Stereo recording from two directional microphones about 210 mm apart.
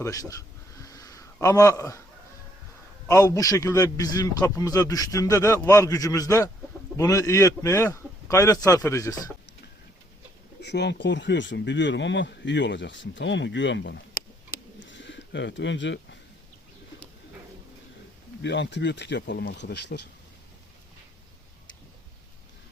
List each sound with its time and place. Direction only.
0.0 s a sound: 15° left (ahead or behind)
3.1 s a man's voice: 15° left (ahead or behind)
10.6 s speech: 55° left (ahead or behind)
14.8 s bird: 60° left (ahead or behind)
18.4 s speech: 60° left (ahead or behind)